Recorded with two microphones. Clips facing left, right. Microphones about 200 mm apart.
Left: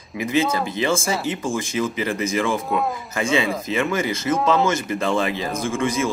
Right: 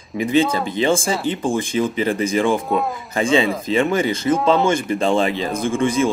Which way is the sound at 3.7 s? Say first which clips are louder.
Right 5 dB; 30° right (ahead or behind).